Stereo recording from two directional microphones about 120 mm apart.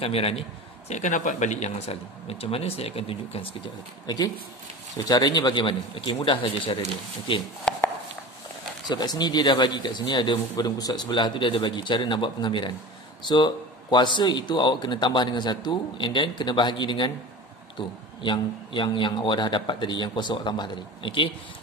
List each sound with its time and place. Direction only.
0.0 s a man's voice: 55° left (ahead or behind)
4.0 s speech: 35° left (ahead or behind)
7.7 s a sound: 5° left (ahead or behind)
8.8 s speech: 35° left (ahead or behind)